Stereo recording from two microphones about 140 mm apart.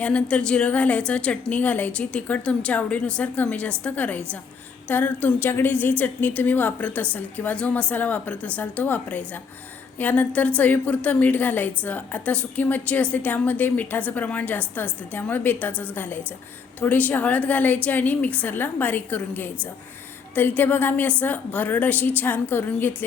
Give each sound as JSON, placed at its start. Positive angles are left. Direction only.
{"t": 0.0, "sound": "a woman's voice", "side_deg": 10}